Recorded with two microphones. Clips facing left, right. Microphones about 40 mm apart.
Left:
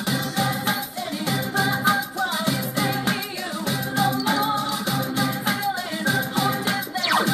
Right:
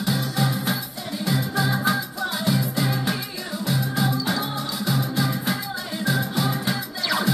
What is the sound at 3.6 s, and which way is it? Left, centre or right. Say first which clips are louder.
Music: left 1 dB; centre.